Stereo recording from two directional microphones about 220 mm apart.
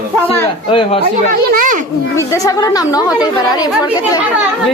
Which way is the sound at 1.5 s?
40° right (ahead or behind).